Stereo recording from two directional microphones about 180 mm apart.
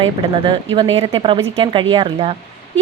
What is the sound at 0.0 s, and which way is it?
Speech, 30° right (ahead or behind).